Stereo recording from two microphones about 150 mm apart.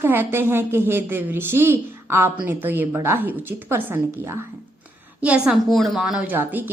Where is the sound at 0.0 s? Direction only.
15° right (ahead or behind).